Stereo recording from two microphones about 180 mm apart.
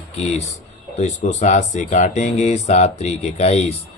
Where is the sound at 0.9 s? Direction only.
40° left (ahead or behind).